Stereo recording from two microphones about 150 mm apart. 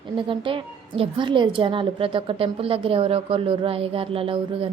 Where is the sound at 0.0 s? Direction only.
35° right (ahead or behind).